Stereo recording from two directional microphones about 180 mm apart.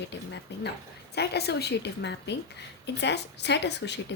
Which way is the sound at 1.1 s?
65° left (ahead or behind).